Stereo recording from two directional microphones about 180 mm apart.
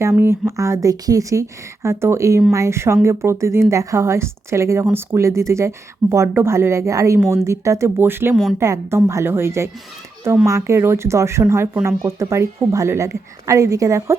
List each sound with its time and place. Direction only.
0.0 s speech: 15° right (ahead or behind)